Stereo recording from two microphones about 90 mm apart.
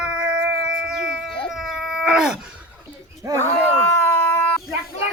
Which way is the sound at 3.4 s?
30° left (ahead or behind).